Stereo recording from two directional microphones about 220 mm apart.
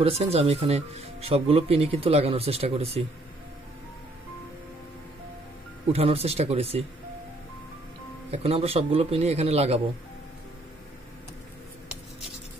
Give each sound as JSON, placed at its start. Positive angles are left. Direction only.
{"t": 0.0, "sound": "speech", "side_deg": -25}
{"t": 5.9, "sound": "speech", "side_deg": -25}
{"t": 8.3, "sound": "speech", "side_deg": -25}